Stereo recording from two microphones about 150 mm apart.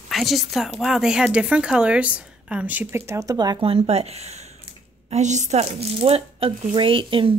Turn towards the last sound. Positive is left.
turn(degrees=-35)  # may be behind; listen again after turning